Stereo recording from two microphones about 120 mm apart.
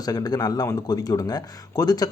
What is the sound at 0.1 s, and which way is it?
A man's voice, 30° left (ahead or behind).